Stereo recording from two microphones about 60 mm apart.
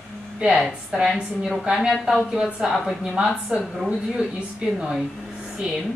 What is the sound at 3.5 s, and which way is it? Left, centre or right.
A woman's voice, centre.